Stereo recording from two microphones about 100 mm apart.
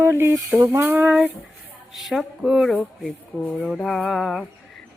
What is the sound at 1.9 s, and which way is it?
Speech, centre (ahead or behind).